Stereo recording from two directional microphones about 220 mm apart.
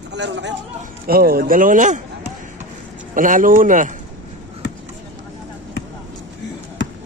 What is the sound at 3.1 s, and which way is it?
Speech, 35° right (ahead or behind).